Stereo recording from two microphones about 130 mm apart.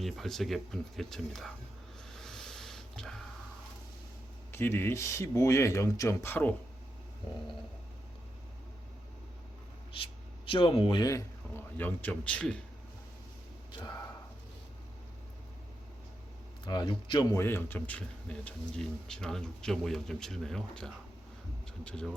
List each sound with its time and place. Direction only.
0.0 s speech: centre (ahead or behind)
2.0 s a sound: 5° left (ahead or behind)
4.5 s speech: 15° left (ahead or behind)
9.9 s speech: 40° left (ahead or behind); by 12.6 s 10° left (ahead or behind)
13.7 s a man's voice: 35° left (ahead or behind)
16.6 s a man's voice: 35° left (ahead or behind)
17.3 s speech: 20° left (ahead or behind)